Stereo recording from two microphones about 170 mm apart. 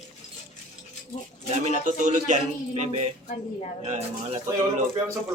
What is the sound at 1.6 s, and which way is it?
Speech, 45° right (ahead or behind).